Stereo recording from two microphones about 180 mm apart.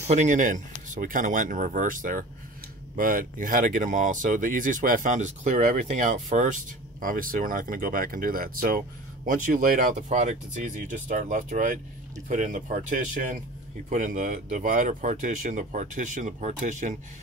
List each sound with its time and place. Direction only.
0.1 s speech: 40° right (ahead or behind)